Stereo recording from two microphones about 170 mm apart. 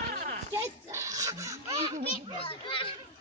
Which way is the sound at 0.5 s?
15° right (ahead or behind).